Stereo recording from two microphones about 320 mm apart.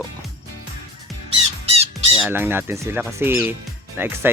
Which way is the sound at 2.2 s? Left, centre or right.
Centre.